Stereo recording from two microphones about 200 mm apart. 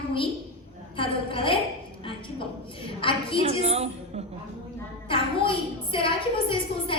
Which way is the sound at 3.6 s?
30° right (ahead or behind).